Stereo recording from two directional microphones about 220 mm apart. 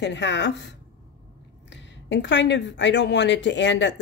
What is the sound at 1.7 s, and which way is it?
Speech, 55° left (ahead or behind).